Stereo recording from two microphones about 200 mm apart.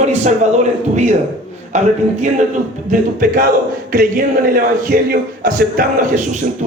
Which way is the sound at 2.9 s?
45° right (ahead or behind).